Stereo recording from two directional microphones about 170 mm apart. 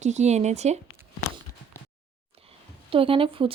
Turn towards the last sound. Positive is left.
turn(degrees=-30)  # may be behind; listen again after turning